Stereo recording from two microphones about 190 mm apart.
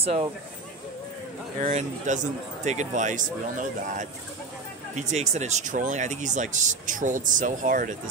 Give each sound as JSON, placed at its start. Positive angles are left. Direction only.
{"t": 0.0, "sound": "speech", "side_deg": -30}
{"t": 1.6, "sound": "speech", "side_deg": -40}